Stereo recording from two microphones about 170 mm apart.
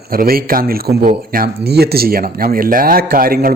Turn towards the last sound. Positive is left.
turn(degrees=-60)  # may be behind; listen again after turning